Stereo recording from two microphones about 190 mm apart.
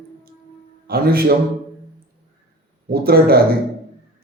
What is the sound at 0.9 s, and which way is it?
Speech, 55° right (ahead or behind).